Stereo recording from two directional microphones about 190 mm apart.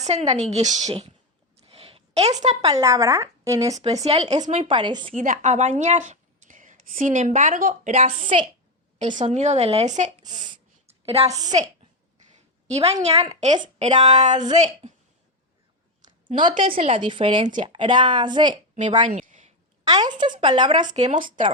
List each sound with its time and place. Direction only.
0.0 s a woman's voice: 35° right (ahead or behind)
1.6 s a sound: 30° right (ahead or behind)
2.6 s a woman's voice: 20° right (ahead or behind)
4.0 s a woman's voice: 35° right (ahead or behind)
5.1 s a woman's voice: 40° right (ahead or behind)
10.2 s a sound: 25° right (ahead or behind)
11.3 s speech: 20° right (ahead or behind)
12.6 s a woman's voice: 35° right (ahead or behind)
16.4 s speech: 25° right (ahead or behind)
17.4 s a woman's voice: 40° right (ahead or behind)
17.7 s speech: 25° right (ahead or behind)
18.9 s a sound: 40° right (ahead or behind)
19.8 s speech: 20° right (ahead or behind)
21.0 s speech: 40° right (ahead or behind)